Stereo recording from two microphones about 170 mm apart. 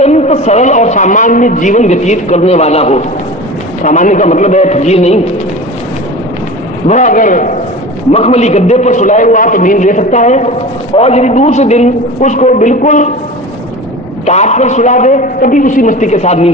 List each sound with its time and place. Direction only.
0.0 s a man's voice: 40° left (ahead or behind)
6.8 s a man's voice: 45° left (ahead or behind)
8.1 s a man's voice: 40° left (ahead or behind)
14.3 s a man's voice: 40° left (ahead or behind)